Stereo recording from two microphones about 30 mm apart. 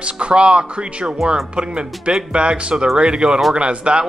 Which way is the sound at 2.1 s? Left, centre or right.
Right.